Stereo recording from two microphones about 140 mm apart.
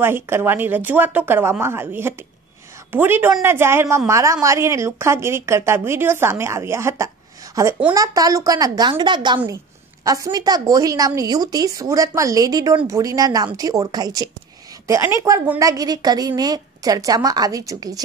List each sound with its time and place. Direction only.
0.0 s a woman's voice: 15° right (ahead or behind)